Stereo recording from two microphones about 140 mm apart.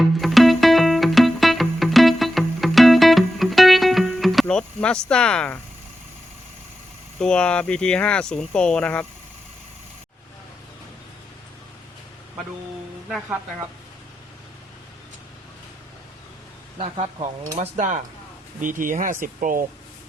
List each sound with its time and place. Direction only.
0.2 s music: centre (ahead or behind)
7.2 s speech: 5° left (ahead or behind)
16.7 s speech: 45° right (ahead or behind)
17.6 s chink: 60° right (ahead or behind)
18.6 s speech: 70° right (ahead or behind)